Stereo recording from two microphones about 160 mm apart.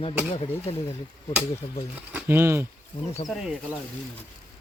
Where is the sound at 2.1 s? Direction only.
10° right (ahead or behind).